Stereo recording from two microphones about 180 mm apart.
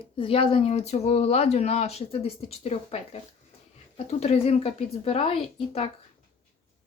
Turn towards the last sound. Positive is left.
turn(degrees=30)  # may be behind; listen again after turning